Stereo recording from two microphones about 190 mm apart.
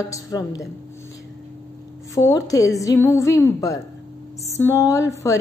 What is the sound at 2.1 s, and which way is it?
A woman's voice, 15° left (ahead or behind).